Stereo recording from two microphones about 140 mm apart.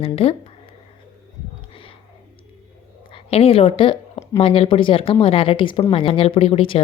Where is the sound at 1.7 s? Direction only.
40° left (ahead or behind).